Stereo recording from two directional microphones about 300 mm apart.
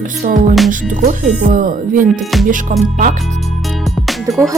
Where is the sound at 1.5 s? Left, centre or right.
Right.